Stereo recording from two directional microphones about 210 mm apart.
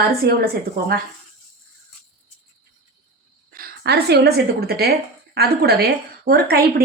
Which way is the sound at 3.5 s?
45° right (ahead or behind).